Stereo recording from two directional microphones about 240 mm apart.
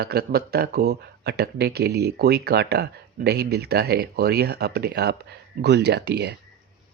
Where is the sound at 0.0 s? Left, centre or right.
Right.